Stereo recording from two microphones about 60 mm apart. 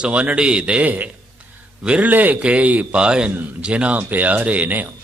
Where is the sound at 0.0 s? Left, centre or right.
Right.